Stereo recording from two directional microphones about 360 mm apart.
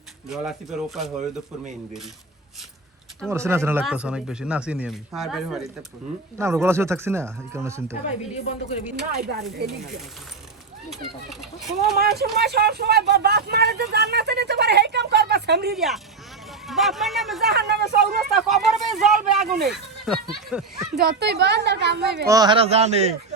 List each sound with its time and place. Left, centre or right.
0.3 s speech: centre
3.2 s speech: centre
9.1 s a child's voice: right
10.8 s speech: centre
11.9 s speech: right
16.6 s speech: centre
17.5 s a child's voice: right
18.3 s speech: centre
20.9 s a child's voice: right
22.3 s speech: centre